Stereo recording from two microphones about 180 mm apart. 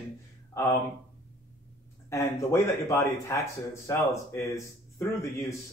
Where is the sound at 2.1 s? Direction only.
15° left (ahead or behind).